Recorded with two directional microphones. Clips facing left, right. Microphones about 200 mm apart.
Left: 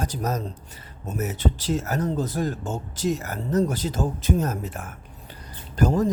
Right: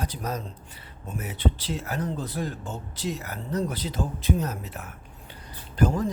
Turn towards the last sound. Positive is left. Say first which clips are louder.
# left 3 dB
turn(degrees=40)  # may be behind; listen again after turning